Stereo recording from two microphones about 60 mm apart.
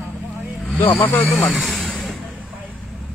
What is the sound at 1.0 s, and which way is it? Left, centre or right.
Speech, left.